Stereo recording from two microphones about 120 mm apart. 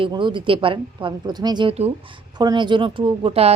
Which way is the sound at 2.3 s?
40° right (ahead or behind).